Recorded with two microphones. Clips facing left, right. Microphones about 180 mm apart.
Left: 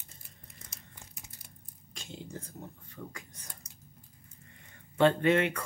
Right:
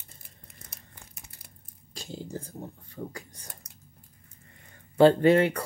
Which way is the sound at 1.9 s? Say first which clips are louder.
Right 6 dB; 35° right (ahead or behind).